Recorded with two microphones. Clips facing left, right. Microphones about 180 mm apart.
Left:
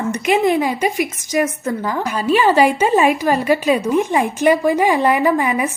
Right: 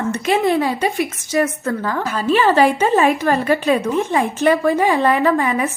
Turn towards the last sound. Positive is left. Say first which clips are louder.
# even
turn(degrees=15)  # may be behind; listen again after turning